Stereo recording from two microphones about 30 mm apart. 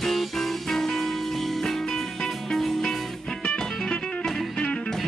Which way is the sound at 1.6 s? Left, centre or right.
Centre.